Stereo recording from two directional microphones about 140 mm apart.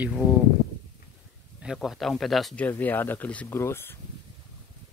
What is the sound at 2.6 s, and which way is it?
Speech, 10° left (ahead or behind).